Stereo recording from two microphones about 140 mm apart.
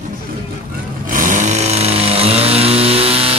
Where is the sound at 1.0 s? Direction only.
75° right (ahead or behind); by 3.4 s 45° right (ahead or behind).